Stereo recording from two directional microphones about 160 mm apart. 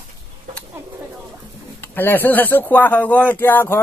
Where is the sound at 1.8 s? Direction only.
15° left (ahead or behind).